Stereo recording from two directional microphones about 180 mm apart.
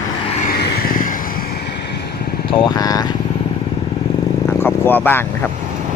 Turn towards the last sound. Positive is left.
turn(degrees=10)  # may be behind; listen again after turning